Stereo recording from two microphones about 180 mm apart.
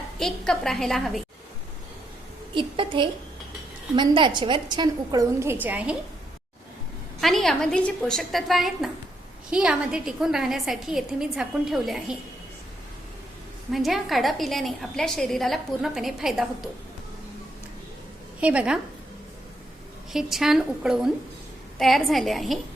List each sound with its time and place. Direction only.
0.2 s a woman's voice: centre (ahead or behind)
2.6 s a woman's voice: 30° right (ahead or behind); by 6.0 s 10° right (ahead or behind)
7.2 s a woman's voice: centre (ahead or behind)
13.7 s a woman's voice: centre (ahead or behind)
18.3 s a woman's voice: 5° right (ahead or behind)
20.1 s a woman's voice: centre (ahead or behind)